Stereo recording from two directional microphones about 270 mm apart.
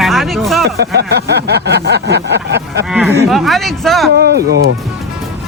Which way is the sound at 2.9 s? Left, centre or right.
Centre.